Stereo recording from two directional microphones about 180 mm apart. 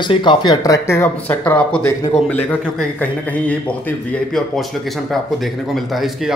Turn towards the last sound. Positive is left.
turn(degrees=0)  # may be behind; listen again after turning